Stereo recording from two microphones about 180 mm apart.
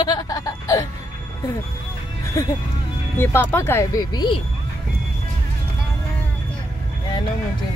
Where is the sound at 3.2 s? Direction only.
10° left (ahead or behind).